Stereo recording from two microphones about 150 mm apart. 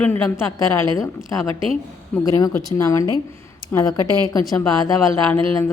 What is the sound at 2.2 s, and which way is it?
A woman's voice, 25° left (ahead or behind).